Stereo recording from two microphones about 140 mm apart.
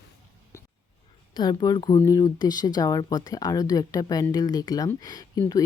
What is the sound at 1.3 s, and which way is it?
Speech, 30° left (ahead or behind).